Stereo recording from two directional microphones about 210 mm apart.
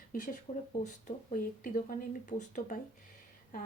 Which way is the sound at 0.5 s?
30° left (ahead or behind).